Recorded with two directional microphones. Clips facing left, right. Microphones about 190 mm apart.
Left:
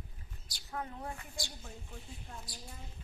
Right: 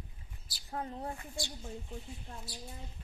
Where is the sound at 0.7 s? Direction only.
30° right (ahead or behind).